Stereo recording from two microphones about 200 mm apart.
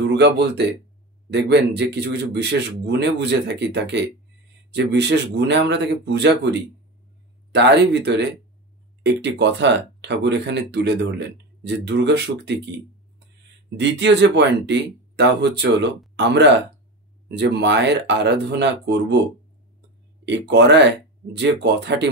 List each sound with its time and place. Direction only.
0.0 s speech: 60° right (ahead or behind)
13.7 s speech: 60° right (ahead or behind)
20.2 s speech: 60° right (ahead or behind)